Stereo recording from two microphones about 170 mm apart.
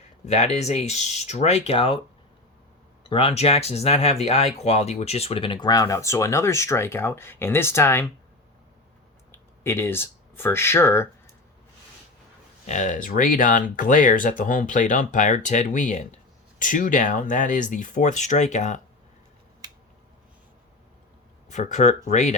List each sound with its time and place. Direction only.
0.3 s speech: 40° left (ahead or behind)
3.1 s speech: 35° left (ahead or behind); by 8.0 s 15° left (ahead or behind)
9.3 s speech: 15° left (ahead or behind)
12.6 s speech: 45° left (ahead or behind)
21.5 s speech: 45° left (ahead or behind)